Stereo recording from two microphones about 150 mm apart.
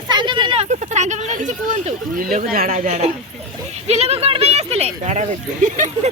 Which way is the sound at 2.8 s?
45° right (ahead or behind).